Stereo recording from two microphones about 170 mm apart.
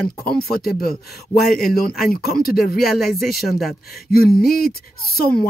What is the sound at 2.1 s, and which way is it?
Speech, 60° left (ahead or behind).